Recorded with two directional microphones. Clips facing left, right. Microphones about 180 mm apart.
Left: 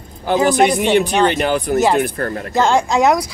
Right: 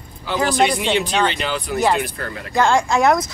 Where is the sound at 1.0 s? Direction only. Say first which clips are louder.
Left 5 dB; 10° left (ahead or behind).